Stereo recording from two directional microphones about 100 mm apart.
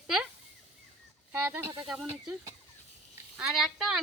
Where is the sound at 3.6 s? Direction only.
5° right (ahead or behind).